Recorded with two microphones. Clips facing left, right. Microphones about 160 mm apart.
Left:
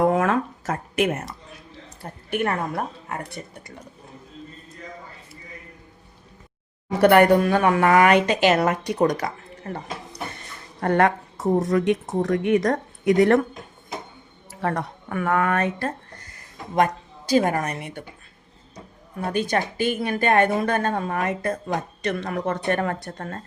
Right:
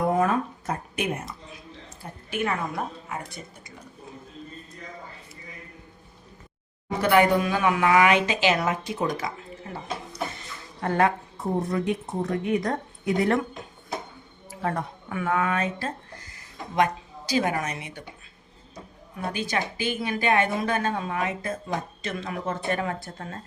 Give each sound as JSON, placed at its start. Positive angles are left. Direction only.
{"t": 0.0, "sound": "a sound", "side_deg": 85}
{"t": 2.3, "sound": "a woman's voice", "side_deg": 60}
{"t": 7.0, "sound": "a woman's voice", "side_deg": 65}
{"t": 8.6, "sound": "a woman's voice", "side_deg": 65}
{"t": 9.7, "sound": "a woman's voice", "side_deg": 50}
{"t": 14.6, "sound": "a woman's voice", "side_deg": 60}
{"t": 16.7, "sound": "a woman's voice", "side_deg": 45}
{"t": 19.1, "sound": "a woman's voice", "side_deg": 55}